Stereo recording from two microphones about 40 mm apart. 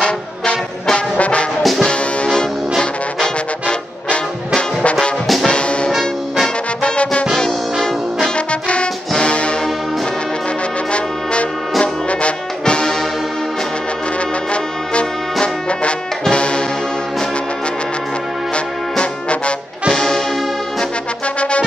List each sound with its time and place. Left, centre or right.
1.1 s music: left
1.8 s music: centre
5.2 s music: centre
5.5 s music: left
5.9 s music: centre
8.5 s music: left
9.2 s brass instrument: left
11.8 s music: left
15.4 s brass instrument: left
18.5 s music: left
19.9 s music: centre
21.4 s music: left